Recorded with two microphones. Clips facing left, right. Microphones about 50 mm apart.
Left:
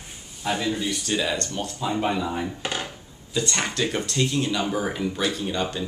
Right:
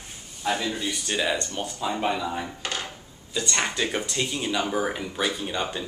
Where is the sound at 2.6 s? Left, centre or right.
Centre.